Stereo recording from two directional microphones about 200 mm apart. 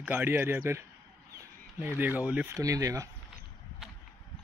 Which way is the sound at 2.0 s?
10° right (ahead or behind).